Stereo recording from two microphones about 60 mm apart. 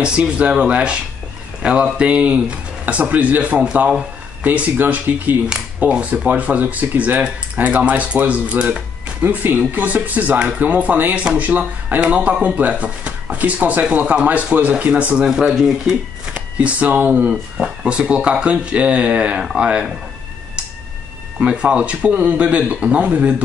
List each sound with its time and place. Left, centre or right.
0.0 s speech: centre
9.2 s speech: right
15.2 s speech: centre
16.3 s speech: right
21.4 s speech: centre